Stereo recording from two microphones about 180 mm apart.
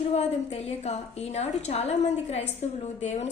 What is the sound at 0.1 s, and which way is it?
Speech, 35° left (ahead or behind).